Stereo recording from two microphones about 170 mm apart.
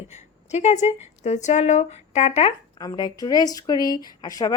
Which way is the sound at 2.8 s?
20° left (ahead or behind).